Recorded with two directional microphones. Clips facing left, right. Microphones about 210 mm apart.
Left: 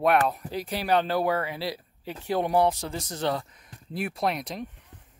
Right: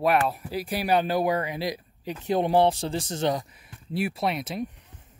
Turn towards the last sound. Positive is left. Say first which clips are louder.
# right 1 dB
turn(degrees=-5)  # may be behind; listen again after turning